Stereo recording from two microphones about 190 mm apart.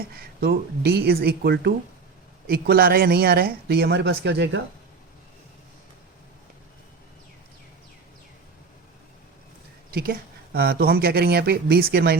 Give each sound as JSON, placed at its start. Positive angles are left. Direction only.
{"t": 0.0, "sound": "speech", "side_deg": -55}
{"t": 9.9, "sound": "speech", "side_deg": -55}